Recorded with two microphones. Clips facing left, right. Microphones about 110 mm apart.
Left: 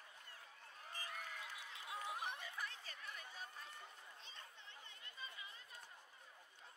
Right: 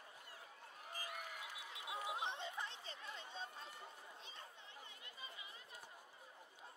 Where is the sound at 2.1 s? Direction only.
25° right (ahead or behind).